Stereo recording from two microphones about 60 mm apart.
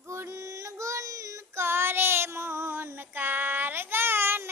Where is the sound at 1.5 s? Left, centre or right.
Right.